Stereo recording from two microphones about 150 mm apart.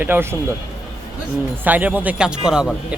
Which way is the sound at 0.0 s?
15° right (ahead or behind).